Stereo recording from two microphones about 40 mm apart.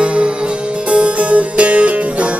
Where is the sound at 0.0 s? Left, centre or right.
Right.